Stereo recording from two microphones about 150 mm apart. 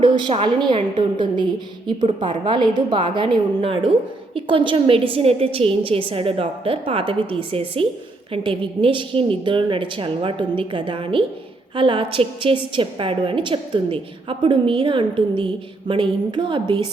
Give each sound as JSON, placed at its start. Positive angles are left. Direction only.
{"t": 0.0, "sound": "a woman's voice", "side_deg": -35}
{"t": 2.0, "sound": "a woman's voice", "side_deg": -45}